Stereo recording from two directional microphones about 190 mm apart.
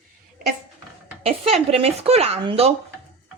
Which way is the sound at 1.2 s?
30° right (ahead or behind).